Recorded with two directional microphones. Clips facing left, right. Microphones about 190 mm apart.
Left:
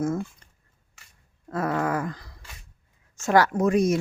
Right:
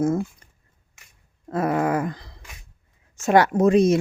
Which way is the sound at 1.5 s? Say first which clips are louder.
Right 4 dB; 20° right (ahead or behind).